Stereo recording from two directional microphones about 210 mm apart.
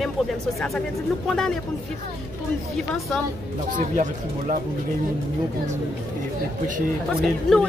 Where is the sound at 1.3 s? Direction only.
Centre (ahead or behind).